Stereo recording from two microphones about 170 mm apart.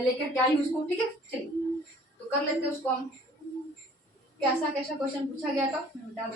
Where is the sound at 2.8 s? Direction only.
10° left (ahead or behind).